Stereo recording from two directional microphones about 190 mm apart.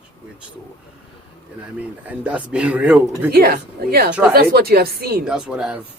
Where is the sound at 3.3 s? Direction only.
50° right (ahead or behind).